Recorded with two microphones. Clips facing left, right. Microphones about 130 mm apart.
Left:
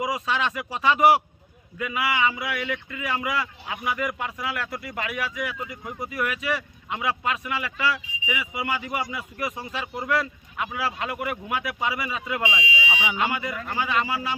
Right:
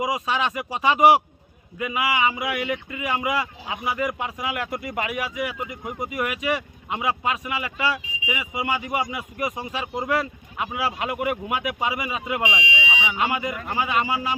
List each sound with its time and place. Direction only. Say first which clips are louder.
0.0 s speech: right 2 dB; 15° right (ahead or behind)
13.0 s speech: right 1 dB; centre (ahead or behind)
13.4 s speech: right 2 dB; 15° right (ahead or behind)